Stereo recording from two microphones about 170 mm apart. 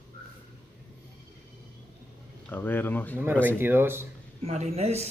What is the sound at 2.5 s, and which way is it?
Speech, 10° left (ahead or behind).